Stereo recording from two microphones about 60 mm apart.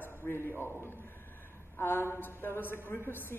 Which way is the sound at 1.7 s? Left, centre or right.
Left.